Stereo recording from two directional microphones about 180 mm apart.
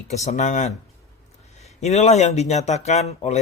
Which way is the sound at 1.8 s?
40° left (ahead or behind).